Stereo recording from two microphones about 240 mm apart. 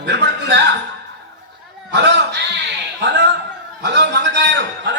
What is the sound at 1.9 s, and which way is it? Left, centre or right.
A man's voice, right.